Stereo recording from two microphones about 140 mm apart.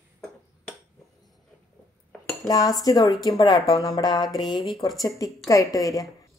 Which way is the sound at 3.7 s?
40° left (ahead or behind).